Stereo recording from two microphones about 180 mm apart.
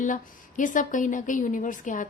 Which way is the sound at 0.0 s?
45° left (ahead or behind).